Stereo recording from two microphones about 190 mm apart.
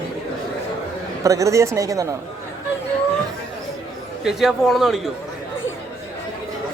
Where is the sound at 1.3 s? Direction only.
15° right (ahead or behind).